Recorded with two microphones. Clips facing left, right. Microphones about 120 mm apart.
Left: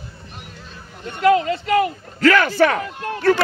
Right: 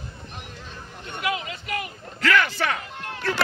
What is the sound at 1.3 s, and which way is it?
Speech, 60° left (ahead or behind).